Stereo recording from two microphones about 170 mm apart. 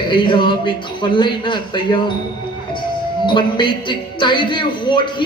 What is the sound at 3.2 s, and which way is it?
A woman's voice, 25° left (ahead or behind).